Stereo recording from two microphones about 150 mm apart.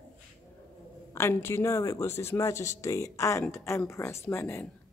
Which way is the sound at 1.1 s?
15° left (ahead or behind).